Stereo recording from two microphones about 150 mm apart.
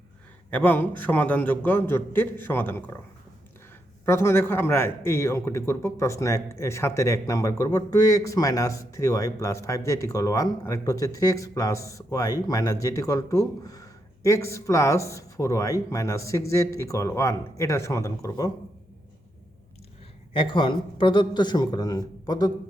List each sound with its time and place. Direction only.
0.5 s a man's voice: 10° left (ahead or behind)
4.0 s a man's voice: 15° left (ahead or behind)
20.3 s a man's voice: 35° left (ahead or behind)